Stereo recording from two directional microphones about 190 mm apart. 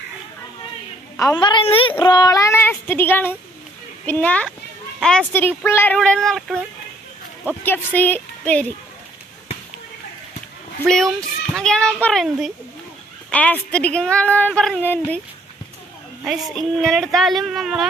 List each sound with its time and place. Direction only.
1.1 s a woman's voice: 20° left (ahead or behind); by 6.6 s 5° left (ahead or behind)
7.6 s a woman's voice: 10° left (ahead or behind)
11.5 s a woman's voice: 5° left (ahead or behind)
16.3 s speech: centre (ahead or behind)